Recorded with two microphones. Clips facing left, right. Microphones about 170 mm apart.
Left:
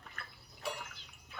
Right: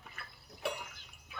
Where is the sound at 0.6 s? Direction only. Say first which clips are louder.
Right 3 dB; 65° right (ahead or behind).